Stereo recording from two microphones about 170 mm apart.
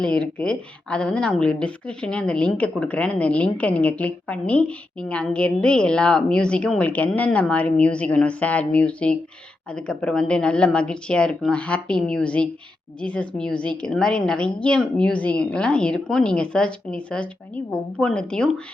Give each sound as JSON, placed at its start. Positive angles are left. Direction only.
{"t": 0.0, "sound": "a woman's voice", "side_deg": 5}